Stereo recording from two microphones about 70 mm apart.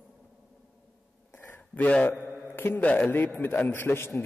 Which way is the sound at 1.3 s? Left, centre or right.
Left.